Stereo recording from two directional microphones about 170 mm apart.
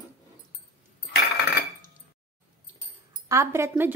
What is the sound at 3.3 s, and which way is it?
Speech, 15° right (ahead or behind).